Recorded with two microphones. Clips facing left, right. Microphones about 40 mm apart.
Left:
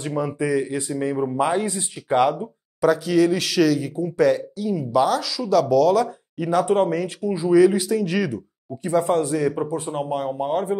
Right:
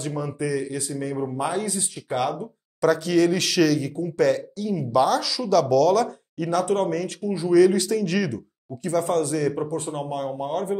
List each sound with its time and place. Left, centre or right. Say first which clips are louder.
0.0 s speech: left 3 dB; left